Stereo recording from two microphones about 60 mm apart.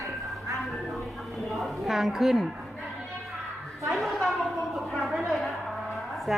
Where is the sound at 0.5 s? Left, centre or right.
Centre.